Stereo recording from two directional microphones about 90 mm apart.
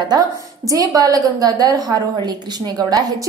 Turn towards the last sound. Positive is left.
turn(degrees=-45)  # may be behind; listen again after turning